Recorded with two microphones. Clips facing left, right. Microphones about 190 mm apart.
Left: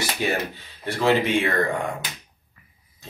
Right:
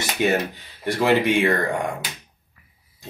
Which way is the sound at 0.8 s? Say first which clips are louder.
Right 2 dB; 15° right (ahead or behind).